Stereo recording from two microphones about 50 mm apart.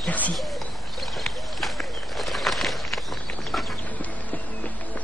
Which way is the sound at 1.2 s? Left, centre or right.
Centre.